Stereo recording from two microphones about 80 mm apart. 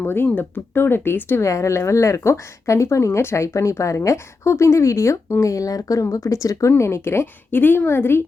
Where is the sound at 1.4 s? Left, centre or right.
Left.